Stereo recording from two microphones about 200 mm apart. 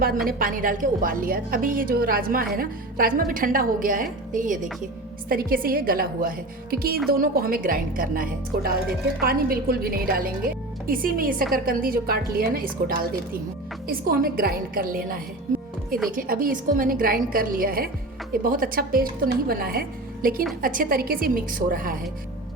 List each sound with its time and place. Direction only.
0.3 s a woman's voice: 45° right (ahead or behind)